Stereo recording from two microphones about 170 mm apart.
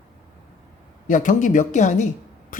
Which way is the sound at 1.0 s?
50° left (ahead or behind).